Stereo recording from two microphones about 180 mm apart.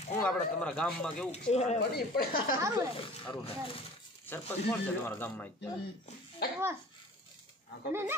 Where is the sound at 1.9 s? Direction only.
55° left (ahead or behind).